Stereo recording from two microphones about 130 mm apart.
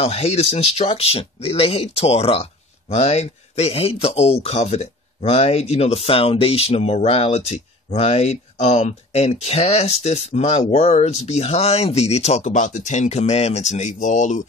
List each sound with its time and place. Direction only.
0.0 s speech: 55° left (ahead or behind); by 14.4 s 70° left (ahead or behind)